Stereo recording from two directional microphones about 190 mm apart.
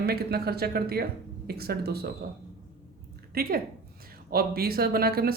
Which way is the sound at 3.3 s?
50° right (ahead or behind).